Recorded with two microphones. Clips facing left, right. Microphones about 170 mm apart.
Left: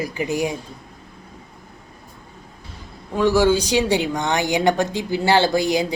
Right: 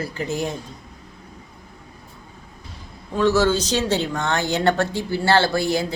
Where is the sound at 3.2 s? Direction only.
15° left (ahead or behind).